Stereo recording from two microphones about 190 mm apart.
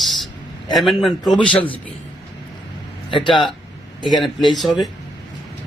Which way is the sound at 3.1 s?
25° left (ahead or behind).